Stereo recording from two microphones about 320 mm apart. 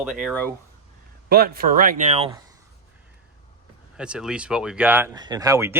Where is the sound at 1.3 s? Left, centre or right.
Right.